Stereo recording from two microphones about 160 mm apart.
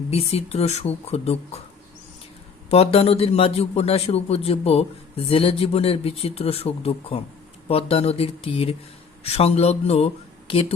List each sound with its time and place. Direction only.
0.1 s a man's voice: 40° left (ahead or behind)
2.6 s a man's voice: 40° left (ahead or behind)